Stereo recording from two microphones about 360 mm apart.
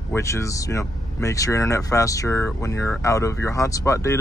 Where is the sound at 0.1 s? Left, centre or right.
Centre.